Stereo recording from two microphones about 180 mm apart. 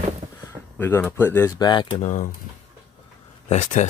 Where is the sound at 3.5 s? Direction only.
40° left (ahead or behind).